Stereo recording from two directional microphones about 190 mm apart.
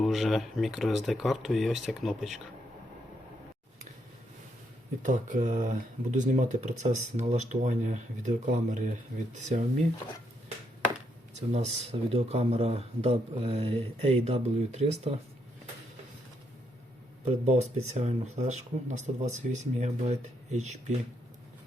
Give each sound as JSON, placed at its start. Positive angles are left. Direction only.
{"t": 0.0, "sound": "speech", "side_deg": 0}
{"t": 5.0, "sound": "speech", "side_deg": -40}
{"t": 11.3, "sound": "speech", "side_deg": -35}
{"t": 17.4, "sound": "speech", "side_deg": -35}